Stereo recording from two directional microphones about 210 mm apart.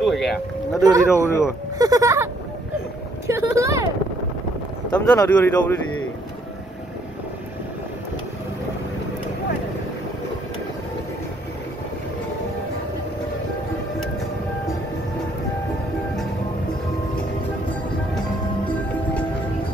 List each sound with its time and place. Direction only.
0.0 s speech: centre (ahead or behind)
1.1 s speech: 10° left (ahead or behind)
1.8 s speech: 15° right (ahead or behind)
3.3 s speech: 15° right (ahead or behind)
4.9 s speech: 10° left (ahead or behind)